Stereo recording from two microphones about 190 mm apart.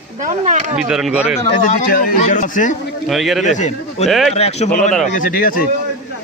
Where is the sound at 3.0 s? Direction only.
Centre (ahead or behind).